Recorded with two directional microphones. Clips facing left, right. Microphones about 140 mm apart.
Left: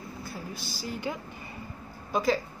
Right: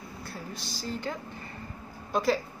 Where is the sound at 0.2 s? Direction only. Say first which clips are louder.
Even; centre (ahead or behind).